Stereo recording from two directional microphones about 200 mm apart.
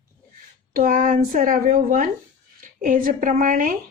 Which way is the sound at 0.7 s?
45° right (ahead or behind).